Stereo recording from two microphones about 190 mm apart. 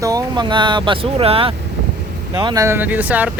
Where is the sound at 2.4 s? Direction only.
20° right (ahead or behind).